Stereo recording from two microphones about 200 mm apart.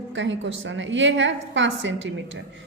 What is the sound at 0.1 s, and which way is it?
A woman's voice, 65° right (ahead or behind).